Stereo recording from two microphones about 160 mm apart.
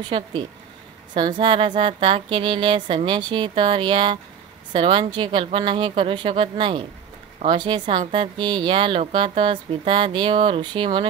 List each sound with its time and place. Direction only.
0.0 s speech: 30° right (ahead or behind)